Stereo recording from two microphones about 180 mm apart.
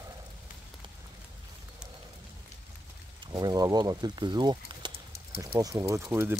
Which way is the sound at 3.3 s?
20° right (ahead or behind).